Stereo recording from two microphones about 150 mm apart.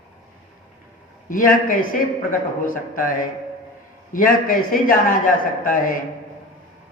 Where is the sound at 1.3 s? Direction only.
65° left (ahead or behind).